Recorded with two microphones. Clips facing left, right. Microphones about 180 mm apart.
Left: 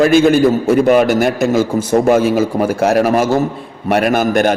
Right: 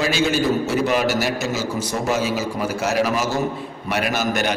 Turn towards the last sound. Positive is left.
turn(degrees=50)  # may be behind; listen again after turning